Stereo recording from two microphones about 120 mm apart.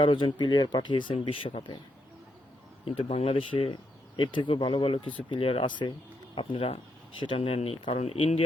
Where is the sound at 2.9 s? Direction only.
50° left (ahead or behind).